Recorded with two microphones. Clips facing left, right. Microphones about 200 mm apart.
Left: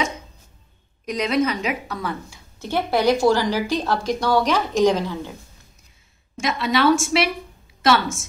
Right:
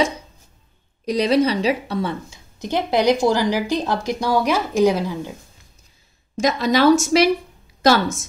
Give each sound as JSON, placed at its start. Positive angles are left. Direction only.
{"t": 1.0, "sound": "a woman's voice", "side_deg": -35}
{"t": 6.3, "sound": "a woman's voice", "side_deg": -40}